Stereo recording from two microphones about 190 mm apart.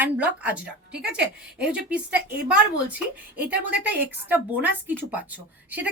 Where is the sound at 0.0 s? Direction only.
5° right (ahead or behind).